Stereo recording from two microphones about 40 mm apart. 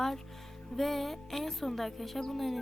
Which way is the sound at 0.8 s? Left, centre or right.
Centre.